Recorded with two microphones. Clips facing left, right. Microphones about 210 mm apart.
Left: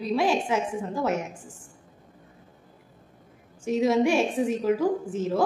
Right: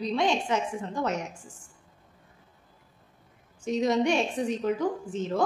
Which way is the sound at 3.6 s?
5° left (ahead or behind).